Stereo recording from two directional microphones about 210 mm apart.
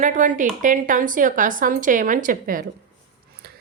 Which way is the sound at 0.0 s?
35° right (ahead or behind).